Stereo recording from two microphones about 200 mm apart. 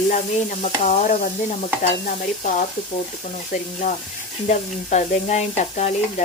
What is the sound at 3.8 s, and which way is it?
Sizzle, 40° left (ahead or behind).